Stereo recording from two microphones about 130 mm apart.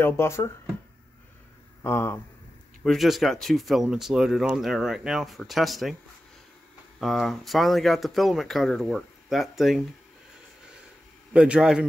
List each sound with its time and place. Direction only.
0.0 s speech: 20° left (ahead or behind)
1.8 s speech: 20° left (ahead or behind)
2.8 s speech: centre (ahead or behind)
7.0 s speech: centre (ahead or behind)
11.3 s a man's voice: 10° right (ahead or behind)